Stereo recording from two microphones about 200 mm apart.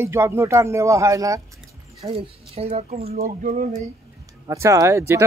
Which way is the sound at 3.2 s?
40° right (ahead or behind).